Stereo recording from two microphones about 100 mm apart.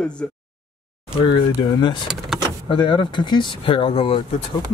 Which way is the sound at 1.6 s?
50° left (ahead or behind).